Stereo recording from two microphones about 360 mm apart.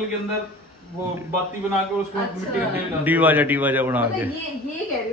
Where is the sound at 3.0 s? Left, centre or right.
Centre.